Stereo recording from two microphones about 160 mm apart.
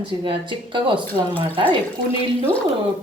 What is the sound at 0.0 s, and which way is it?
Speech, 30° right (ahead or behind).